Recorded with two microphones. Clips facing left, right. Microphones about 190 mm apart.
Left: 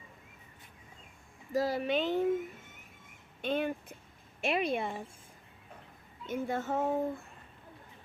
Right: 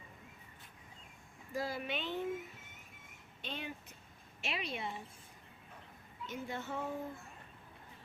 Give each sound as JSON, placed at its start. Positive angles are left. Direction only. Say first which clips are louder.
{"t": 1.5, "sound": "speech", "louder": "left 9 dB", "side_deg": 40}
{"t": 3.4, "sound": "a child's voice", "louder": "left 12 dB", "side_deg": 50}
{"t": 6.2, "sound": "a child's voice", "louder": "left 8 dB", "side_deg": 50}